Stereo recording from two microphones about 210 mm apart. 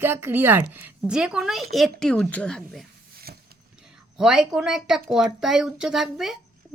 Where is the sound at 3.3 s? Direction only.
45° right (ahead or behind).